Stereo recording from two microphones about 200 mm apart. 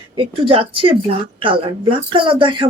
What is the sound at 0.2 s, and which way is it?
Speech, 25° right (ahead or behind).